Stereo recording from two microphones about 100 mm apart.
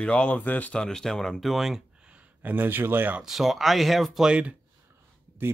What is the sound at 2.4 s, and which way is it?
Speech, 20° right (ahead or behind).